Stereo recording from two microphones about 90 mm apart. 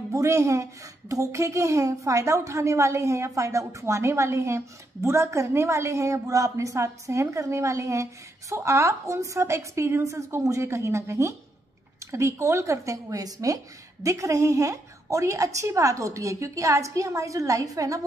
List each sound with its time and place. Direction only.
0.1 s a woman's voice: 35° right (ahead or behind)